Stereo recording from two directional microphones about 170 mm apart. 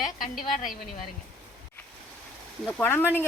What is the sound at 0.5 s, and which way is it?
Speech, 55° left (ahead or behind).